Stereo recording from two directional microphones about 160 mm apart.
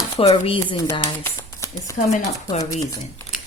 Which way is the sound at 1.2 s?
20° left (ahead or behind).